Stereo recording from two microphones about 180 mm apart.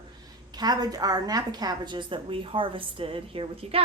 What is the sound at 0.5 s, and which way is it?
Speech, 20° right (ahead or behind).